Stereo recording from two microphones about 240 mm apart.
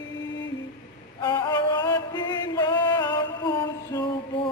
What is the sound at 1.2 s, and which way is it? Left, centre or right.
Music, centre.